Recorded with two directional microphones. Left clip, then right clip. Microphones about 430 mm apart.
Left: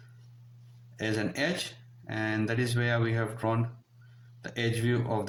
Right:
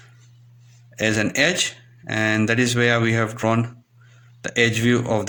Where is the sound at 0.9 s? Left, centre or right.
Left.